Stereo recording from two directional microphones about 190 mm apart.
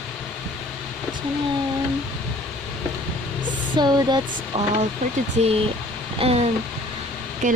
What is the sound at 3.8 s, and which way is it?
Speech, 20° right (ahead or behind).